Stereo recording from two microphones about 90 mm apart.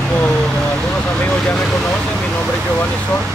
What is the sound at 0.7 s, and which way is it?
Speech, 10° left (ahead or behind).